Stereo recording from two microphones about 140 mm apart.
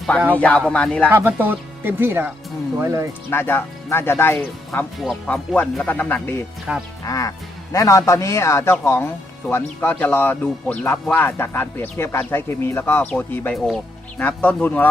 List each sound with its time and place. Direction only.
0.3 s speech: 10° left (ahead or behind)
1.3 s speech: 15° right (ahead or behind)
3.2 s speech: 15° left (ahead or behind)
4.9 s speech: 5° left (ahead or behind)
6.7 s speech: 5° right (ahead or behind)
7.0 s speech: 25° left (ahead or behind)